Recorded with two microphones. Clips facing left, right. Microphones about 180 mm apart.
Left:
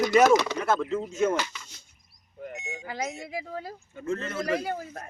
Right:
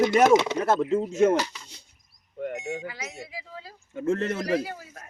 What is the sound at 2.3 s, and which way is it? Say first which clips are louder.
Speech: right 8 dB; 55° right (ahead or behind).